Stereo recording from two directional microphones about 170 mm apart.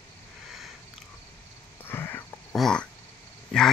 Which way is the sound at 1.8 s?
15° left (ahead or behind).